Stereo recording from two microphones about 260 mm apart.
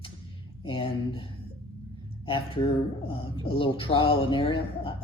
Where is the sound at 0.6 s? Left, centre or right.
Centre.